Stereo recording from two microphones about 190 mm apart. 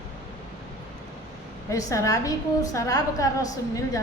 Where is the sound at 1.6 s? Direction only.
15° left (ahead or behind).